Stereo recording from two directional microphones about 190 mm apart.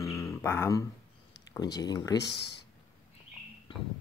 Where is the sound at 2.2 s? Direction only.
60° left (ahead or behind).